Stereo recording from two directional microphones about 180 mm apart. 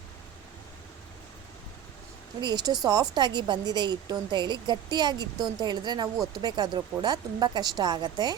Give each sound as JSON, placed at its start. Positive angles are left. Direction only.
{"t": 2.4, "sound": "a woman's voice", "side_deg": -25}